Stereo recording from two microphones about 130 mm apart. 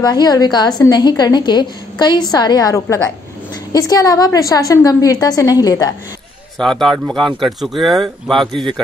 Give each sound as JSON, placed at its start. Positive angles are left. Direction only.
{"t": 0.0, "sound": "a woman's voice", "side_deg": 30}
{"t": 6.6, "sound": "speech", "side_deg": 0}